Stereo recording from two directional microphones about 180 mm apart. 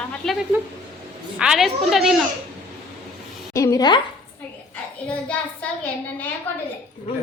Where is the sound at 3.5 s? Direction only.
15° left (ahead or behind).